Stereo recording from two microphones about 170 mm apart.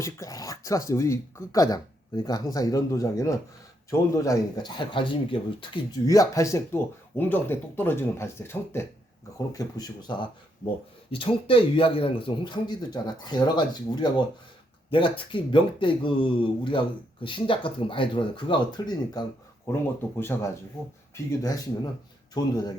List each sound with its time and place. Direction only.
0.0 s speech: 20° left (ahead or behind)
19.6 s speech: 15° left (ahead or behind)
22.4 s speech: 25° left (ahead or behind)